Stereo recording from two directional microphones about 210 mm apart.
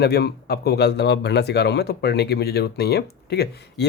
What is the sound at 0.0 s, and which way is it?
Speech, 50° left (ahead or behind).